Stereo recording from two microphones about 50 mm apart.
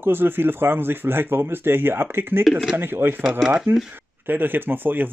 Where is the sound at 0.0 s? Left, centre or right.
Right.